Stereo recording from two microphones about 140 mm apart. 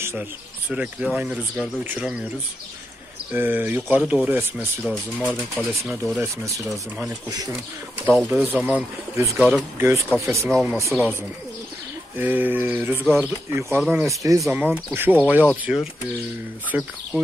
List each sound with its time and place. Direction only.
0.0 s speech: 15° right (ahead or behind)
3.3 s speech: 15° right (ahead or behind)
5.2 s speech: centre (ahead or behind)
6.1 s speech: 20° right (ahead or behind)
8.2 s speech: 10° right (ahead or behind)
10.9 s speech: centre (ahead or behind)
12.2 s speech: 15° right (ahead or behind)